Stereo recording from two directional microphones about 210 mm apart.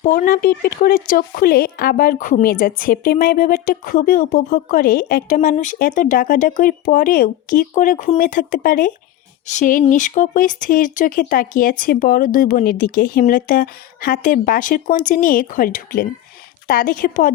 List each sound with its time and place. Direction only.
0.0 s speech: 40° left (ahead or behind)